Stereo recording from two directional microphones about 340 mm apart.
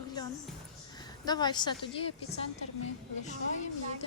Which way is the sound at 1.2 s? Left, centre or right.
Centre.